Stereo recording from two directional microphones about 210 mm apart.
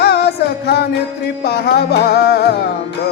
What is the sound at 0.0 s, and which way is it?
Music, 50° left (ahead or behind).